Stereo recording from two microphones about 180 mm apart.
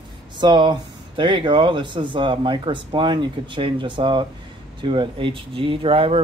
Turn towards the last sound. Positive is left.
turn(degrees=-30)  # may be behind; listen again after turning